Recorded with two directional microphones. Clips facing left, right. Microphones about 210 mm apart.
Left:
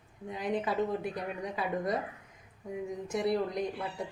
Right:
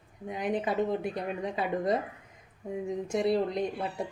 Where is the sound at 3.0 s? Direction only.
25° right (ahead or behind).